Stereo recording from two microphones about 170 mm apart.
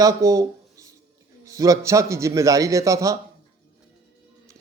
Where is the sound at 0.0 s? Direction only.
20° right (ahead or behind).